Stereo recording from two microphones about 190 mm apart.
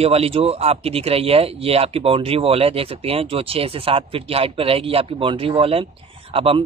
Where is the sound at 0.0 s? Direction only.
30° right (ahead or behind).